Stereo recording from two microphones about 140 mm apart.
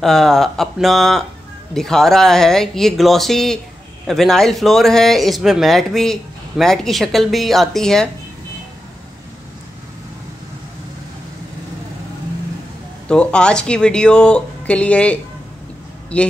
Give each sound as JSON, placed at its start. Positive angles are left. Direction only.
{"t": 0.0, "sound": "speech", "side_deg": 5}
{"t": 13.1, "sound": "speech", "side_deg": 5}